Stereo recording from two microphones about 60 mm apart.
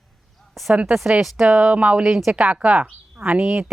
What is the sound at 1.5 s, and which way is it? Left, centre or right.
Speech, centre.